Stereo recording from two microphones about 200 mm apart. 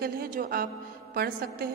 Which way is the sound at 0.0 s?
45° right (ahead or behind).